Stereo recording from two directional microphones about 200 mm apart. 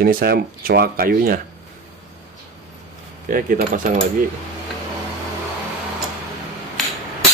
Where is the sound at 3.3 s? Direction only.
45° right (ahead or behind).